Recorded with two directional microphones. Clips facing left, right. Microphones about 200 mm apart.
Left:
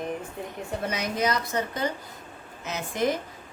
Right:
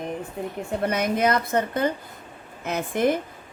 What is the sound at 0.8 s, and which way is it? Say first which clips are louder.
A woman's voice: right 5 dB; 55° right (ahead or behind).